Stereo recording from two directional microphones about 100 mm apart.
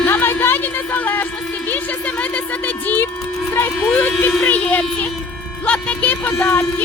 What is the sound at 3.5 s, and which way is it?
Run, 20° left (ahead or behind).